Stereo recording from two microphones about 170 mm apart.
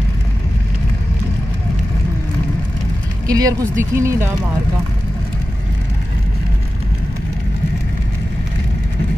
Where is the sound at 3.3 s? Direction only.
20° right (ahead or behind).